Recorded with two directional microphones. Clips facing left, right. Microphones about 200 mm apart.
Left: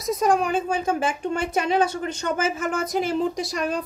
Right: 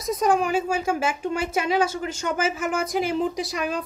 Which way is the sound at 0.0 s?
Centre (ahead or behind).